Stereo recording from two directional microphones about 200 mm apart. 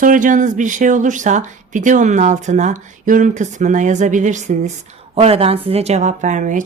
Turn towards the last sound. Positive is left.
turn(degrees=-40)  # may be behind; listen again after turning